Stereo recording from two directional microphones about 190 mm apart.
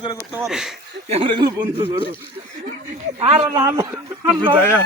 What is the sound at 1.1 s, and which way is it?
Speech, 30° right (ahead or behind).